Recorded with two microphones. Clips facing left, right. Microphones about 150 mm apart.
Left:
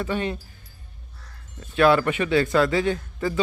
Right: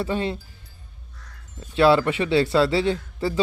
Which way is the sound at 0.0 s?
30° right (ahead or behind).